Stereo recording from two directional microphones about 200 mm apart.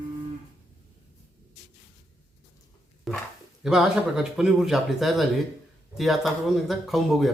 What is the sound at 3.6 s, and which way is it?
Speech, centre (ahead or behind).